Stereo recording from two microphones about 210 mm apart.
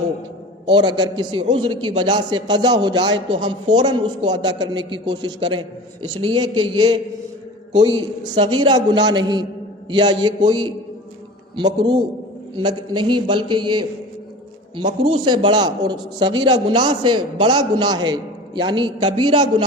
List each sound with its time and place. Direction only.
0.6 s a man's voice: 20° right (ahead or behind)